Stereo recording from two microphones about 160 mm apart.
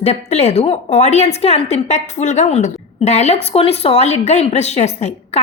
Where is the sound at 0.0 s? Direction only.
45° left (ahead or behind).